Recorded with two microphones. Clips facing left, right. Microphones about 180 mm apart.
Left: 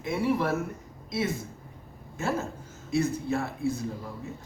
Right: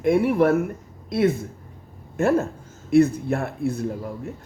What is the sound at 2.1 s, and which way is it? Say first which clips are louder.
Speech: right 10 dB; 60° right (ahead or behind).